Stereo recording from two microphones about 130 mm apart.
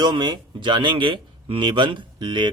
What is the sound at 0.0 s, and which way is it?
Speech, 35° right (ahead or behind).